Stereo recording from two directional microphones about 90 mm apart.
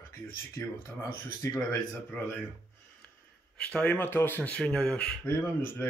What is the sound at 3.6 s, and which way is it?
Speech, 15° left (ahead or behind).